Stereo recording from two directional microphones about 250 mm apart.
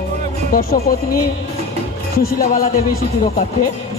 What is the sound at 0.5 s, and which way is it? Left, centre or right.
Speech, left.